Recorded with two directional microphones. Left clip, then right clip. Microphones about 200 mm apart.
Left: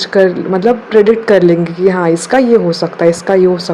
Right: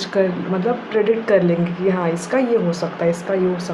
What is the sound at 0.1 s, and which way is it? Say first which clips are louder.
Speech: left 9 dB; 35° left (ahead or behind).